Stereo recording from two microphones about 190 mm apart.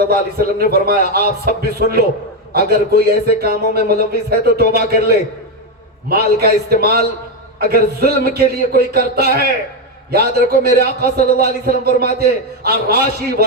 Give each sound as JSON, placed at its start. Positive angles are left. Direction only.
{"t": 0.1, "sound": "a man's voice", "side_deg": -55}